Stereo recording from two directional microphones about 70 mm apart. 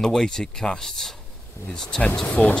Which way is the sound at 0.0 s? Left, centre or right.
Centre.